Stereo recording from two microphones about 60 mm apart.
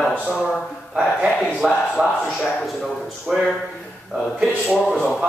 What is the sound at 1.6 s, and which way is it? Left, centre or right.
Speech, centre.